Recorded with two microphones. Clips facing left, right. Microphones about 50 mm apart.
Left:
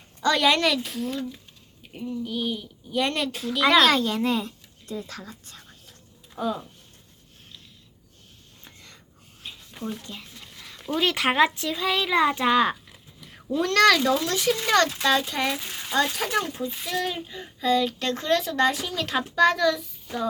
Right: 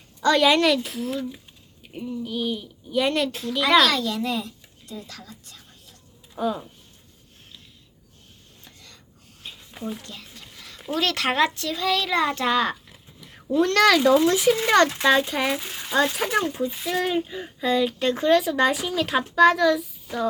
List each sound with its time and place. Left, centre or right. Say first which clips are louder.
0.2 s speech: right 3 dB; centre
3.8 s speech: left 2 dB; left
6.3 s speech: right 2 dB; centre
8.6 s a sound: left 1 dB; left
9.4 s a sound: right 1 dB; centre
11.0 s a child's voice: left 1 dB; centre
12.7 s speech: right 2 dB; centre